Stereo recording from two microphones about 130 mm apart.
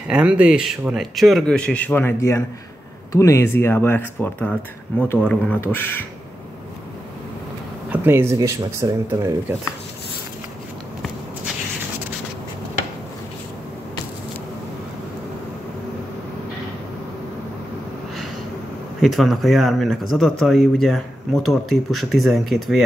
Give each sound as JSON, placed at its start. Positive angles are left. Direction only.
{"t": 0.1, "sound": "speech", "side_deg": -10}
{"t": 7.9, "sound": "speech", "side_deg": -15}
{"t": 18.9, "sound": "speech", "side_deg": 0}